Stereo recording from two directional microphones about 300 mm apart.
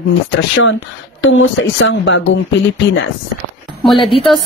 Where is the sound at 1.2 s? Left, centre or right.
Left.